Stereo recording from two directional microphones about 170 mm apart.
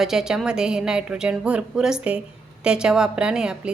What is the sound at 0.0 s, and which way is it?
A woman's voice, 5° right (ahead or behind).